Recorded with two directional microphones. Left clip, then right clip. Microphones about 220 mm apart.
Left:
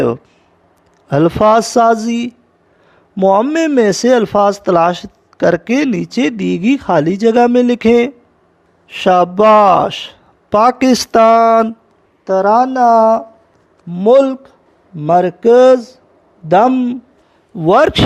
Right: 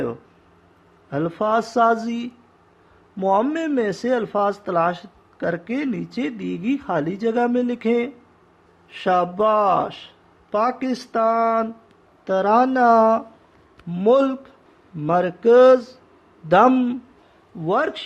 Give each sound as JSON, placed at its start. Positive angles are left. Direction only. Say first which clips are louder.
{"t": 1.1, "sound": "a man's voice", "louder": "left 11 dB", "side_deg": 40}
{"t": 12.2, "sound": "speech", "louder": "left 7 dB", "side_deg": 20}
{"t": 17.6, "sound": "a man's voice", "louder": "left 12 dB", "side_deg": 45}